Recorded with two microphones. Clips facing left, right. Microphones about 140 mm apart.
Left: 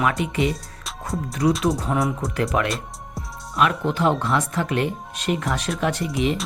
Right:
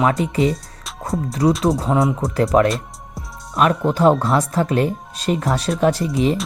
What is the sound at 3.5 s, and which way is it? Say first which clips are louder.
Speech: right 4 dB; 40° right (ahead or behind).